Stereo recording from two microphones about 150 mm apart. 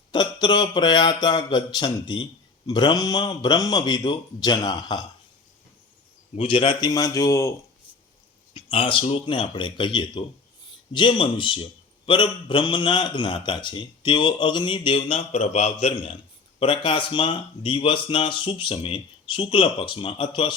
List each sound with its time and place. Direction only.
0.1 s a man's voice: 30° left (ahead or behind)
6.3 s a man's voice: 35° left (ahead or behind); by 7.5 s 20° left (ahead or behind)
8.5 s a man's voice: 35° left (ahead or behind)